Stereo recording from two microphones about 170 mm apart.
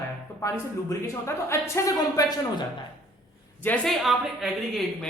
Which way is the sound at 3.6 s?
10° left (ahead or behind).